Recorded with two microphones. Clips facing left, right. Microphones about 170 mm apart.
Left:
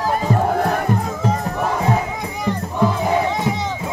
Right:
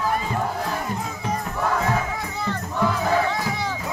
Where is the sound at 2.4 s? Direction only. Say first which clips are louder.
Left 5 dB; 20° left (ahead or behind).